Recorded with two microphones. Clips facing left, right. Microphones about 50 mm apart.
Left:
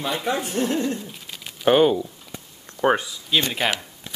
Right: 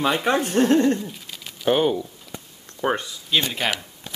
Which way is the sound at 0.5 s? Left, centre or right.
Right.